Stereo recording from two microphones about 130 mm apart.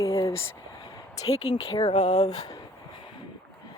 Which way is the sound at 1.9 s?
60° left (ahead or behind).